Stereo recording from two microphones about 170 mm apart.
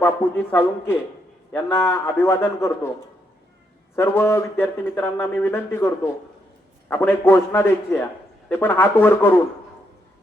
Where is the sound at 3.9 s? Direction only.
15° left (ahead or behind).